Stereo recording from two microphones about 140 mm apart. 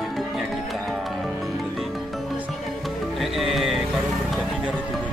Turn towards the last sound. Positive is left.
turn(degrees=0)  # may be behind; listen again after turning